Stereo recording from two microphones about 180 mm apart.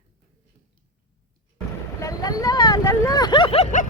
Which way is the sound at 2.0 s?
20° left (ahead or behind).